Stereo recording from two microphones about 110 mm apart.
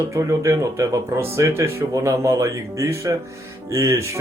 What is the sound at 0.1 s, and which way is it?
Speech, 25° right (ahead or behind).